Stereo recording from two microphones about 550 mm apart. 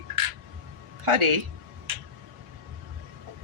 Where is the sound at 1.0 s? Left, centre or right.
Right.